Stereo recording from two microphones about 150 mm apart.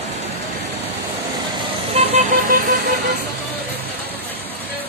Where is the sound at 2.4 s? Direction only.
65° right (ahead or behind).